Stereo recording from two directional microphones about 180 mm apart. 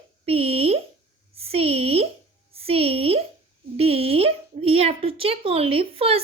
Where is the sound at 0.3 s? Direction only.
35° right (ahead or behind).